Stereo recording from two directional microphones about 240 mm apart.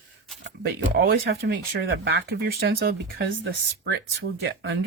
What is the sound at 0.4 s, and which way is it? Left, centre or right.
Speech, right.